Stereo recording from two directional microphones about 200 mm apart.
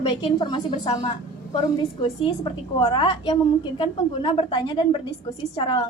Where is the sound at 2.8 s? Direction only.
20° left (ahead or behind).